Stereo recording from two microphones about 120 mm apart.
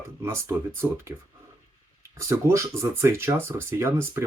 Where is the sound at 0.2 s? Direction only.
25° right (ahead or behind).